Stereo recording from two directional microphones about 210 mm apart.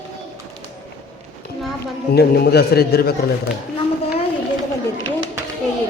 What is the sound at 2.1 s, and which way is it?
A man's voice, 50° left (ahead or behind).